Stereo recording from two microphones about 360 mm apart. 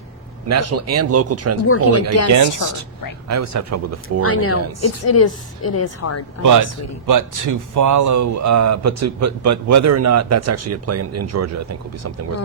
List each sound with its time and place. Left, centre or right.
0.4 s speech: right
1.6 s speech: left
2.6 s speech: right
4.2 s speech: left
6.4 s a man's voice: right